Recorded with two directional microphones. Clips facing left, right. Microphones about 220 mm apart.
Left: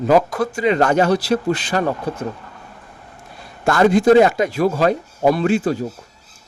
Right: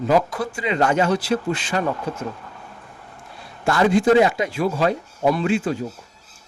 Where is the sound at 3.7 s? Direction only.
45° left (ahead or behind).